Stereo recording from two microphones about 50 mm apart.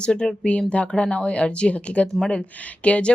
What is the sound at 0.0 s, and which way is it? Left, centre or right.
Speech, centre.